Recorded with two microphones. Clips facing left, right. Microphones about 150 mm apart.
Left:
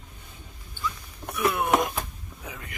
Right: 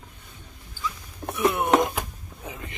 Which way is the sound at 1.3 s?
25° right (ahead or behind).